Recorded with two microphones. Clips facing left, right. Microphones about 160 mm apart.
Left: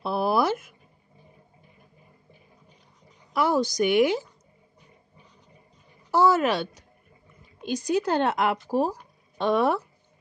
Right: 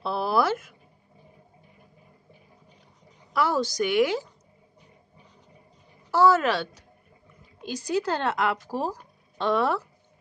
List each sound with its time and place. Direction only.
0.0 s a sound: 15° left (ahead or behind)
3.3 s a woman's voice: 15° left (ahead or behind)
6.1 s a woman's voice: 15° left (ahead or behind)